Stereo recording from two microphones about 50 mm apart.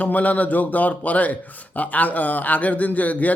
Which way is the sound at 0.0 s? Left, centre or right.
Left.